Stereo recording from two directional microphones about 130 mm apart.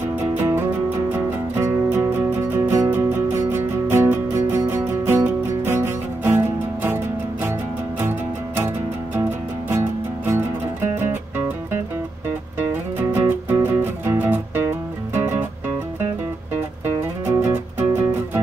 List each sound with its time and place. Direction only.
0.4 s music: 15° right (ahead or behind)
9.1 s music: 20° right (ahead or behind)
13.1 s music: 15° right (ahead or behind)
17.3 s music: 20° right (ahead or behind)